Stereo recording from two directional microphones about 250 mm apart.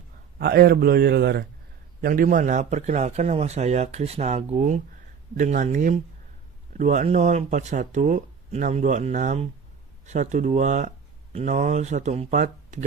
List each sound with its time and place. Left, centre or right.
0.3 s a man's voice: right